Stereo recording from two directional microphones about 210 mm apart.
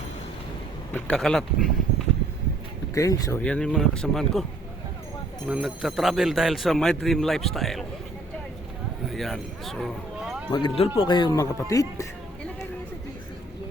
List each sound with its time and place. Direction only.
0.9 s speech: 5° left (ahead or behind)
2.9 s speech: 15° left (ahead or behind)
3.4 s speech: 5° left (ahead or behind)
5.5 s speech: centre (ahead or behind)
9.0 s speech: centre (ahead or behind)
10.5 s speech: 25° left (ahead or behind)